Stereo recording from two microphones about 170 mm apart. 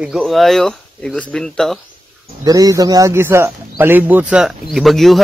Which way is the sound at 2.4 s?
20° right (ahead or behind).